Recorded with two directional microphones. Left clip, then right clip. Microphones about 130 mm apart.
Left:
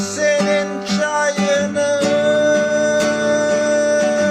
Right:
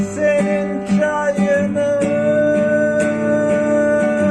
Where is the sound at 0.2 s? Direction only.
25° left (ahead or behind).